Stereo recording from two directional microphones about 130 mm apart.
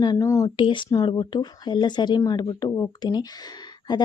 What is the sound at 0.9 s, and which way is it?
Speech, 30° left (ahead or behind).